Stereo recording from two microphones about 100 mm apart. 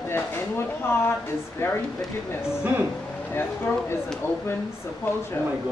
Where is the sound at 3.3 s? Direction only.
25° left (ahead or behind).